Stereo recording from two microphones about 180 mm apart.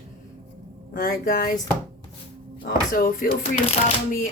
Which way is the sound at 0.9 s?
50° left (ahead or behind).